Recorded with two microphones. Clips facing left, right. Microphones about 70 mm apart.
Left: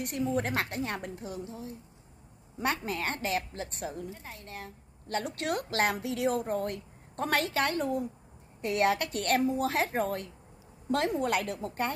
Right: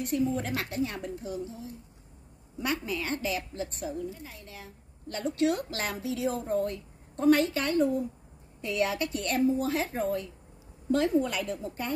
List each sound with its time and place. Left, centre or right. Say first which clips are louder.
0.0 s a woman's voice: right 2 dB; left
2.6 s a woman's voice: left 1 dB; left